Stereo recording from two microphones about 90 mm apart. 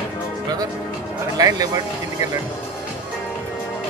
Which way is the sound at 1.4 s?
45° right (ahead or behind).